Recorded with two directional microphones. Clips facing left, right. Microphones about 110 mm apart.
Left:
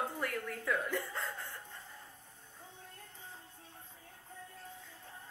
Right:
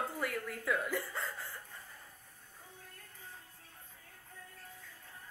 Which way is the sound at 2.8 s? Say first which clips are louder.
Left 2 dB; 25° left (ahead or behind).